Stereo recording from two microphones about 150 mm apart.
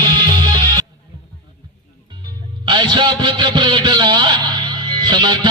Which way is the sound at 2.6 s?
30° right (ahead or behind).